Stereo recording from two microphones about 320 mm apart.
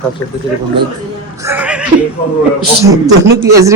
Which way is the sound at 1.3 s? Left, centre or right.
Centre.